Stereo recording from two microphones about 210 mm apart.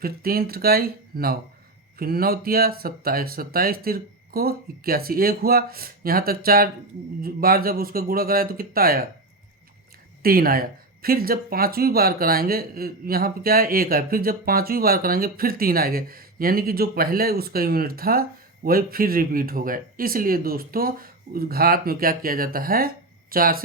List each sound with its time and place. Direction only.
0.0 s speech: 45° right (ahead or behind)
10.2 s speech: 45° right (ahead or behind)